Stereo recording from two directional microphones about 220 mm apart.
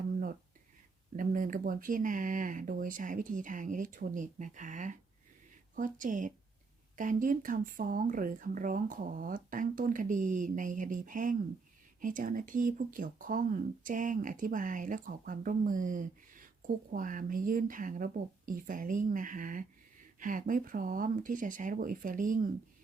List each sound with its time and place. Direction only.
1.1 s speech: 35° right (ahead or behind)